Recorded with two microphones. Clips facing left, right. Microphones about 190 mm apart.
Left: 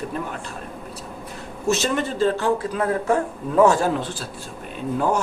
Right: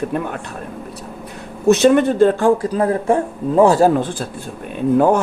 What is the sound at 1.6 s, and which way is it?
Speech, 60° right (ahead or behind).